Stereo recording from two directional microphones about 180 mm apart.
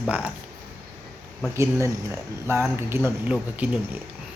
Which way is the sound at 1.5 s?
15° right (ahead or behind).